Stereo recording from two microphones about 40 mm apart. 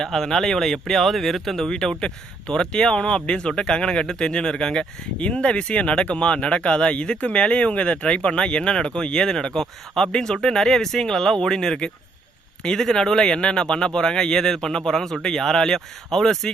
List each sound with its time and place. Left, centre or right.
0.0 s speech: centre